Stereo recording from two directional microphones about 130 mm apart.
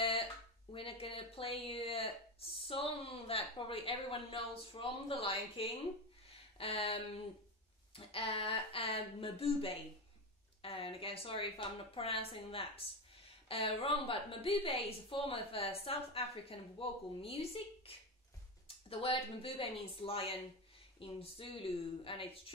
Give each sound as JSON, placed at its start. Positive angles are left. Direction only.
{"t": 0.0, "sound": "speech", "side_deg": 45}
{"t": 6.2, "sound": "a sound", "side_deg": 45}
{"t": 7.9, "sound": "a woman's voice", "side_deg": 45}